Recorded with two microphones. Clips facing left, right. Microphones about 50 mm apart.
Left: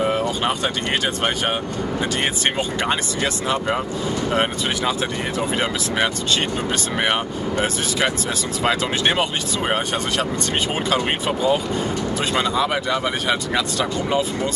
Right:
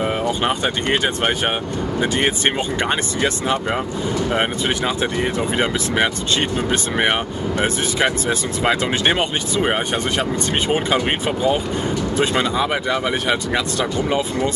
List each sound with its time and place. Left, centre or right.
2.0 s speech: centre
6.7 s speech: centre
9.1 s speech: centre